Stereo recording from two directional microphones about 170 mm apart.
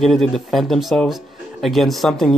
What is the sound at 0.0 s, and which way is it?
Speech, centre (ahead or behind).